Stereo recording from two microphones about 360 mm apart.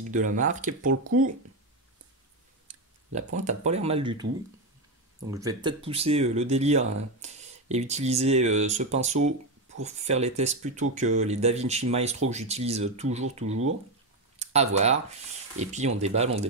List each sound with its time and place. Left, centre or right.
0.1 s speech: right
2.7 s tick-tock: centre
3.3 s speech: centre
5.3 s speech: centre
14.4 s speech: centre